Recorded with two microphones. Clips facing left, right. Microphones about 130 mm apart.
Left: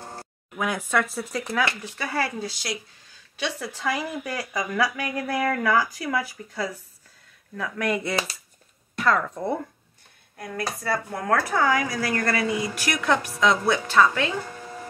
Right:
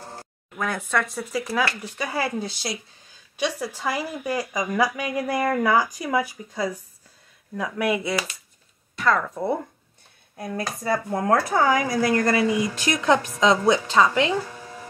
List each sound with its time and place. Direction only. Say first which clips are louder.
0.2 s speech: left 1 dB; 10° left (ahead or behind)
2.0 s speech: right 1 dB; 15° right (ahead or behind)
10.3 s speech: right 1 dB; 20° right (ahead or behind)